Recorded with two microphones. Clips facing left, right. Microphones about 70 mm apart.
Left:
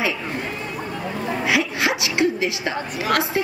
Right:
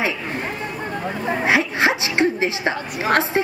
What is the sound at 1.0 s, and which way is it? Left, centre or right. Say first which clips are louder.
A woman's voice: right 3 dB; right.